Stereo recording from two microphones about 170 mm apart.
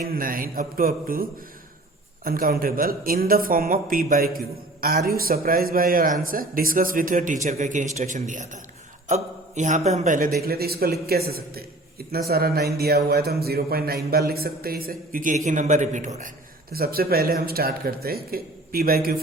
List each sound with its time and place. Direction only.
0.0 s a man's voice: 55° right (ahead or behind)
10.4 s a man's voice: 65° right (ahead or behind); by 16.3 s 45° right (ahead or behind)
16.7 s speech: 60° right (ahead or behind)